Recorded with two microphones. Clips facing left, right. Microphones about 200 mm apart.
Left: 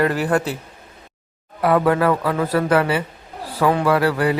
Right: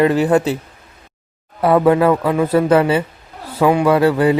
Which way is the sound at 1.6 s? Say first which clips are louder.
Right 4 dB; 25° right (ahead or behind).